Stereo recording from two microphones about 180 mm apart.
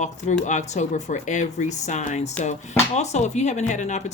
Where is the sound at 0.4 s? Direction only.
40° left (ahead or behind).